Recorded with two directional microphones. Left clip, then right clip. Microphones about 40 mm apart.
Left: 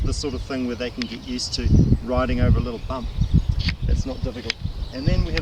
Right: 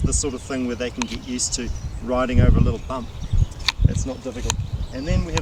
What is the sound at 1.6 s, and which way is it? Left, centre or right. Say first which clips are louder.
Speech: left 7 dB; centre.